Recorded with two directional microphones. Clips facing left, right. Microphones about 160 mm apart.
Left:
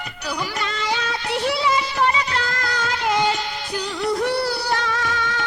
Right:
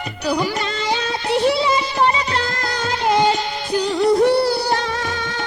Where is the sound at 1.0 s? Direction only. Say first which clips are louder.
Right 6 dB; 25° right (ahead or behind).